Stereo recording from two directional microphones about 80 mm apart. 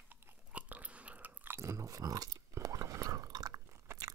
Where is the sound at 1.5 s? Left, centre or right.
Right.